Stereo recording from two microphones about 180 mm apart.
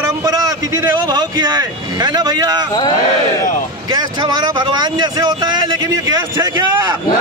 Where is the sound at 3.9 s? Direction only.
25° right (ahead or behind).